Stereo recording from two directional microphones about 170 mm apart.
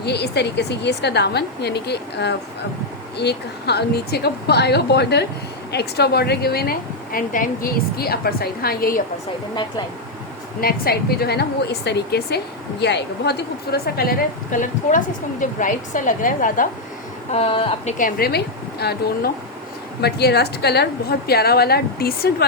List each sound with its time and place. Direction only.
0.0 s a woman's voice: 75° left (ahead or behind); by 9.0 s 60° left (ahead or behind)
10.6 s a woman's voice: 60° left (ahead or behind)
17.3 s a woman's voice: 30° left (ahead or behind)
17.9 s a woman's voice: 60° left (ahead or behind)